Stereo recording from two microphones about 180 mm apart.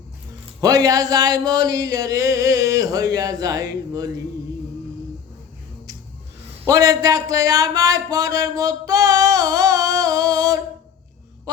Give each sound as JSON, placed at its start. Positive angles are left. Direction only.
{"t": 0.6, "sound": "speech", "side_deg": -20}
{"t": 6.7, "sound": "speech", "side_deg": -20}
{"t": 11.5, "sound": "a sound", "side_deg": -20}